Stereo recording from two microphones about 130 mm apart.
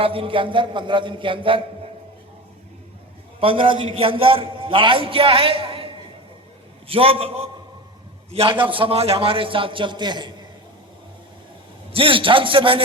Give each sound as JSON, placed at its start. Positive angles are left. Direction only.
{"t": 0.0, "sound": "a sound", "side_deg": -45}
{"t": 3.4, "sound": "a man's voice", "side_deg": -40}
{"t": 11.9, "sound": "a man's voice", "side_deg": -45}